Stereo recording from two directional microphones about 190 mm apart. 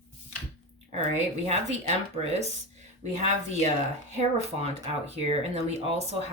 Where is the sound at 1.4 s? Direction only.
35° right (ahead or behind).